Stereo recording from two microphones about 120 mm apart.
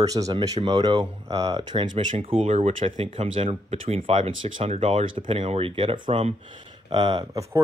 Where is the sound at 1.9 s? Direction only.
90° right.